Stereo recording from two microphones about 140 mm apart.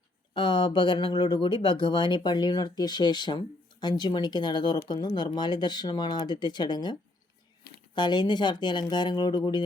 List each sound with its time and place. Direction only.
0.3 s speech: 35° left (ahead or behind)
7.9 s speech: 30° left (ahead or behind)